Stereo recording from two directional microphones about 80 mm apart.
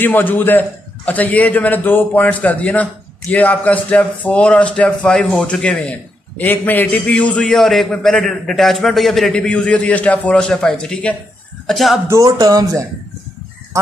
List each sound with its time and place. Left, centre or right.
0.0 s a man's voice: left
7.4 s a man's voice: centre
11.6 s speech: centre
12.3 s speech: right